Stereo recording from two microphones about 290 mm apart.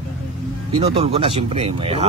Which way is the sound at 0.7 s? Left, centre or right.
Centre.